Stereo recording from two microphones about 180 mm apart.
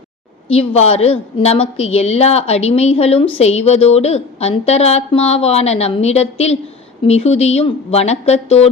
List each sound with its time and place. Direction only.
0.4 s a woman's voice: 30° left (ahead or behind)